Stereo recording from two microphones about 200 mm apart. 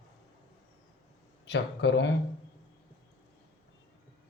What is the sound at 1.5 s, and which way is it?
Speech, 60° left (ahead or behind).